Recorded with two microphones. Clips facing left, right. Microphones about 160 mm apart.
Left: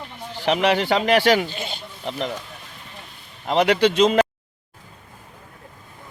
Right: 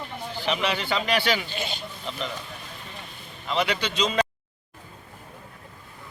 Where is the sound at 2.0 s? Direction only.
65° left (ahead or behind).